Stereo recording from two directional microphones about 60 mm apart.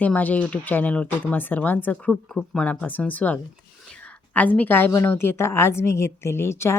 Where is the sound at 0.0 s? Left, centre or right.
Left.